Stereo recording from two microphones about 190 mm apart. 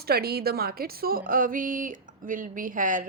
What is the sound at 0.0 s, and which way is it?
A woman's voice, 55° right (ahead or behind).